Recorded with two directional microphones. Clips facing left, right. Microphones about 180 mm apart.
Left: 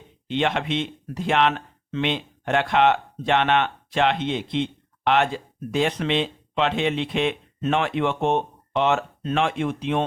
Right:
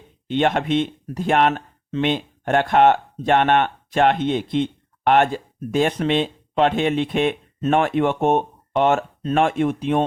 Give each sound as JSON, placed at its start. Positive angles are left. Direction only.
{"t": 0.3, "sound": "speech", "side_deg": -50}